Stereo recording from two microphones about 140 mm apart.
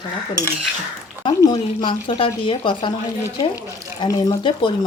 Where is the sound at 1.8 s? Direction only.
35° left (ahead or behind).